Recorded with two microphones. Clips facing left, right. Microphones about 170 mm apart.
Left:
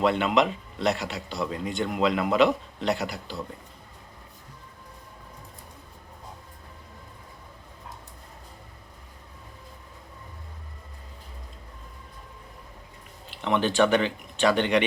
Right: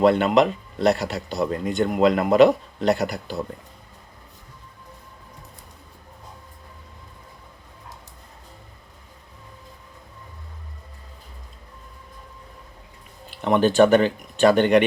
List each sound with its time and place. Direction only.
0.0 s a man's voice: 40° right (ahead or behind)
13.4 s a man's voice: 45° right (ahead or behind)